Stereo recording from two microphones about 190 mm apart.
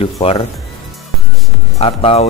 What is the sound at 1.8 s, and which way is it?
Speech, 30° left (ahead or behind).